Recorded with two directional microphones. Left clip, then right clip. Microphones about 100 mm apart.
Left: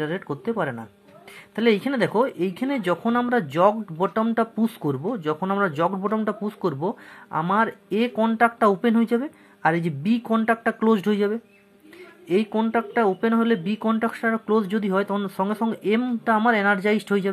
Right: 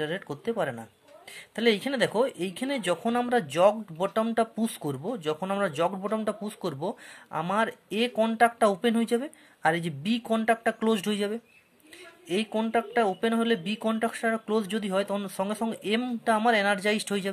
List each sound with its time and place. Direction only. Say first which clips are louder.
0.0 s speech: left 4 dB; 25° right (ahead or behind)